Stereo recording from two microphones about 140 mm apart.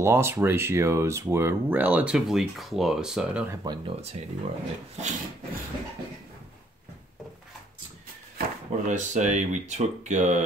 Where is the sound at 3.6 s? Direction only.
30° right (ahead or behind).